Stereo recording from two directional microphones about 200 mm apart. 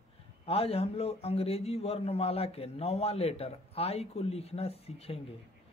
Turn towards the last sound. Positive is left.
turn(degrees=30)  # may be behind; listen again after turning